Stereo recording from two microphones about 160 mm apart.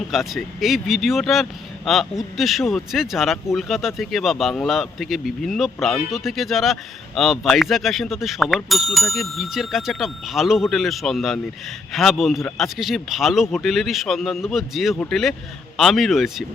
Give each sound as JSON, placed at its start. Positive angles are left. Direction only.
{"t": 0.1, "sound": "speech", "side_deg": 0}